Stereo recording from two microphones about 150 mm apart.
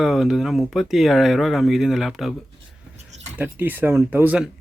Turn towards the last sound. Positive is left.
turn(degrees=-10)  # may be behind; listen again after turning